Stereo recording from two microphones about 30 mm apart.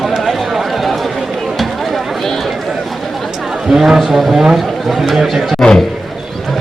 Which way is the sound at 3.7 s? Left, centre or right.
Centre.